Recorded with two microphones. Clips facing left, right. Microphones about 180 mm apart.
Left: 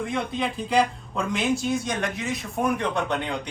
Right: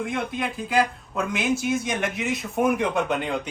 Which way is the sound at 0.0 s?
Centre (ahead or behind).